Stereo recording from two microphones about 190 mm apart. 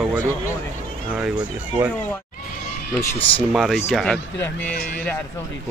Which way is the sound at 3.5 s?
Centre (ahead or behind).